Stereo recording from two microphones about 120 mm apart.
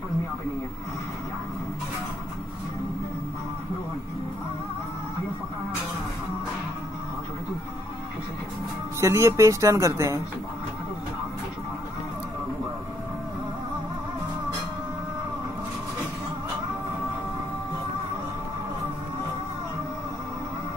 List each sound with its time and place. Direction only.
9.0 s speech: 25° right (ahead or behind)